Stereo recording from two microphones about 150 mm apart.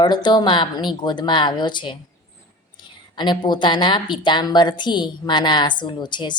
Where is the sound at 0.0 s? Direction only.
30° left (ahead or behind).